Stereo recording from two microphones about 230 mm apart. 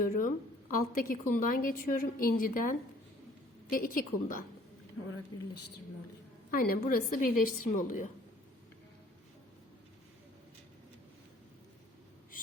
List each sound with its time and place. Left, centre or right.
0.0 s a woman's voice: left
6.5 s a woman's voice: left